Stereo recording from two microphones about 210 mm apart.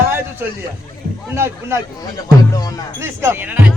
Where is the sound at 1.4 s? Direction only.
10° right (ahead or behind).